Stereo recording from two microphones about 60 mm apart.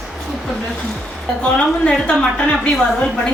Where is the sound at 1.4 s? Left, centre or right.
Centre.